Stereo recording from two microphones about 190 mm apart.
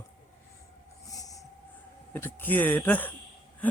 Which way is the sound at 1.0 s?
20° left (ahead or behind).